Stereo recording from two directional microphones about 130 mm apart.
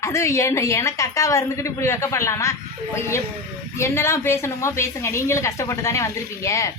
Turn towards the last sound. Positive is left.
turn(degrees=25)  # may be behind; listen again after turning